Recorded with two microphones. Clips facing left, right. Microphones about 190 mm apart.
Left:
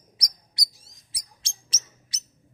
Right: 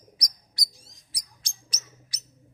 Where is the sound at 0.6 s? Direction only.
20° left (ahead or behind).